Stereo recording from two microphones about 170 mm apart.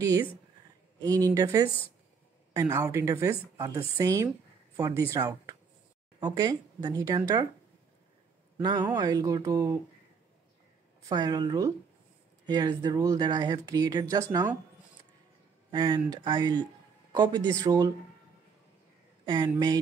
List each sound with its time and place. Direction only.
1.2 s speech: 20° right (ahead or behind)
8.6 s speech: 25° right (ahead or behind)
11.0 s speech: 20° right (ahead or behind)
15.7 s speech: 25° right (ahead or behind)
19.2 s speech: 25° right (ahead or behind)